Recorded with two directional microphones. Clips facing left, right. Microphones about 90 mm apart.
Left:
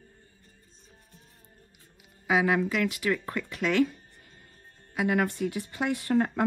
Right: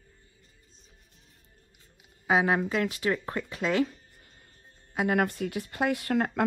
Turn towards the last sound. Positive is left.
turn(degrees=-60)  # may be behind; listen again after turning